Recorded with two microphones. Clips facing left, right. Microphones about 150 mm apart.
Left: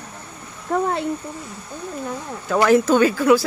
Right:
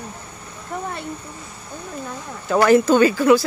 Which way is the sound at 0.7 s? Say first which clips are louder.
Left 8 dB; 90° left.